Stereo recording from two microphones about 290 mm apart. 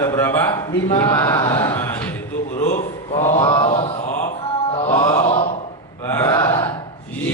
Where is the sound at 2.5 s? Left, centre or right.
Left.